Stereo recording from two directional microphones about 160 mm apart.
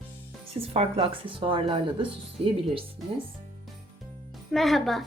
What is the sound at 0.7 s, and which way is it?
Speech, 35° right (ahead or behind).